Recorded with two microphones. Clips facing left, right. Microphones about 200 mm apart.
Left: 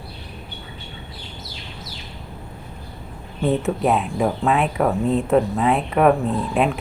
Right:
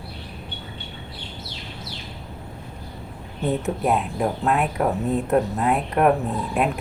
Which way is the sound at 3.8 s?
Centre (ahead or behind).